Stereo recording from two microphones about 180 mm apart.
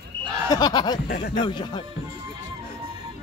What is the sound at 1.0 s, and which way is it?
Speech, 60° left (ahead or behind).